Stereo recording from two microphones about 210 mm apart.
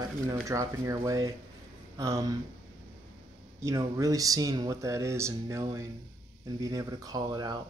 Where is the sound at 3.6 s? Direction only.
15° right (ahead or behind).